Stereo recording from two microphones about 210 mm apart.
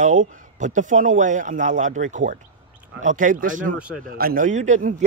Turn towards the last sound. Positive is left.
turn(degrees=-35)  # may be behind; listen again after turning